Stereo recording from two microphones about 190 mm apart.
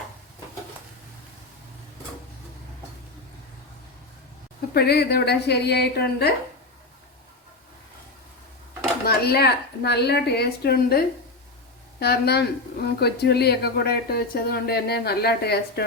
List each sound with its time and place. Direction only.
4.7 s speech: 55° left (ahead or behind)
9.0 s speech: 55° left (ahead or behind)